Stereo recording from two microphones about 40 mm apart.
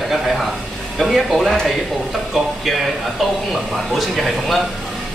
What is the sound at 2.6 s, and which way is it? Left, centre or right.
A man's voice, centre.